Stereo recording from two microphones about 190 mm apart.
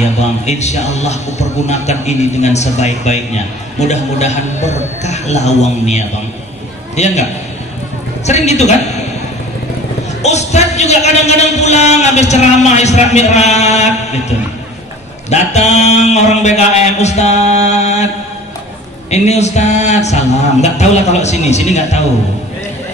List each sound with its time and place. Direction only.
0.0 s a man's voice: 35° left (ahead or behind)
8.3 s a man's voice: 35° left (ahead or behind)
10.2 s a man's voice: 35° left (ahead or behind)
15.2 s a man's voice: 35° left (ahead or behind)